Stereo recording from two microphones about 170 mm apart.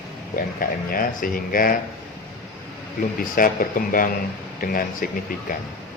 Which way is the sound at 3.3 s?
55° left (ahead or behind).